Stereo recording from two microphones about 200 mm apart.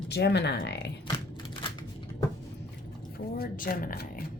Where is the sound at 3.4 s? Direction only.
45° left (ahead or behind).